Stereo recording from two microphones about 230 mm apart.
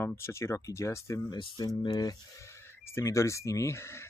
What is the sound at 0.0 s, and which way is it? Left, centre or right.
Speech, centre.